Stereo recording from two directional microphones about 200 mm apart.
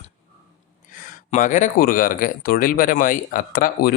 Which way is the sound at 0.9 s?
40° left (ahead or behind).